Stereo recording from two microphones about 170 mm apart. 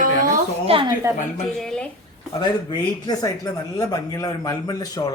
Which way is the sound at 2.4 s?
25° left (ahead or behind).